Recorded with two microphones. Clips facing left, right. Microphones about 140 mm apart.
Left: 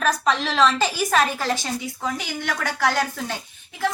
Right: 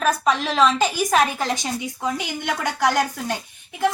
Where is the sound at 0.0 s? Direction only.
10° right (ahead or behind).